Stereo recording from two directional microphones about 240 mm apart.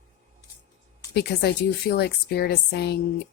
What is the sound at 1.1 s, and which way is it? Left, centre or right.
A woman's voice, left.